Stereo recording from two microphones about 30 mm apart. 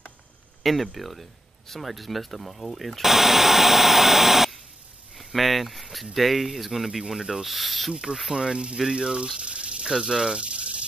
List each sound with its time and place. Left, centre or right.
0.7 s speech: centre
7.4 s speech: centre
7.9 s speech: right
9.4 s sizzle: right
9.8 s speech: right
10.4 s snake: right